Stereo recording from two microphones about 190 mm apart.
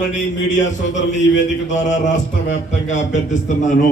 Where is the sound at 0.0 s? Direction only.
40° left (ahead or behind).